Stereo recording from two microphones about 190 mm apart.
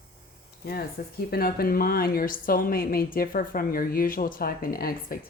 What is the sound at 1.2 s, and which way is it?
A woman's voice, 55° left (ahead or behind).